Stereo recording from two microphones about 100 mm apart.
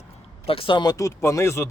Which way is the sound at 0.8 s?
35° left (ahead or behind).